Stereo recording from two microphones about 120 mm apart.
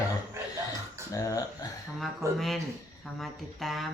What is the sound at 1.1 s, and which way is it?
Speech, 25° left (ahead or behind).